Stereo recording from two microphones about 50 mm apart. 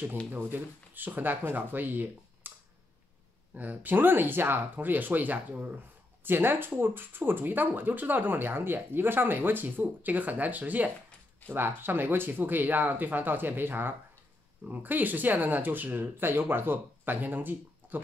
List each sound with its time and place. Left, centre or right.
0.3 s speech: right
3.5 s speech: right
11.4 s speech: right